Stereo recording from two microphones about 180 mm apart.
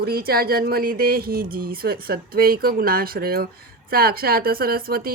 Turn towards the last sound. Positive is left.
turn(degrees=-55)  # may be behind; listen again after turning